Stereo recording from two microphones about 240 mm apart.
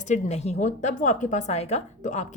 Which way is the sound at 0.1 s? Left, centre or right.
Left.